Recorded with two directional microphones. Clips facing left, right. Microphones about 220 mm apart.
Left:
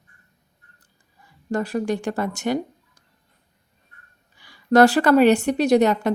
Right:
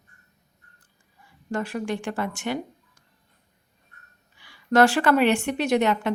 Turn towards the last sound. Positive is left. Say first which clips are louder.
# left 5 dB
turn(degrees=40)  # may be behind; listen again after turning